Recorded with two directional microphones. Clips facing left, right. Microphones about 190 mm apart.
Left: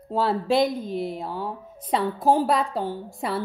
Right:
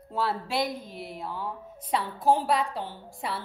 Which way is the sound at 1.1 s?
30° left (ahead or behind).